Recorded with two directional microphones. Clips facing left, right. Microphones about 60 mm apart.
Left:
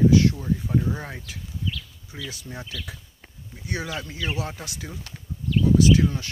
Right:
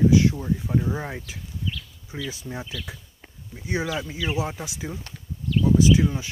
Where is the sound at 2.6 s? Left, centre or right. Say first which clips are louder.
Right 2 dB; centre.